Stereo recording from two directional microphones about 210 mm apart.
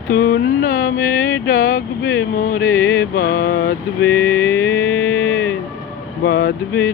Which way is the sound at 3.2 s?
45° left (ahead or behind).